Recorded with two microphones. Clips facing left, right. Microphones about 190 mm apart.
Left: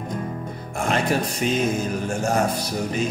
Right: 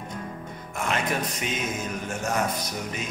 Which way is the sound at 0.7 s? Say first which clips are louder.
Left 5 dB; 35° left (ahead or behind).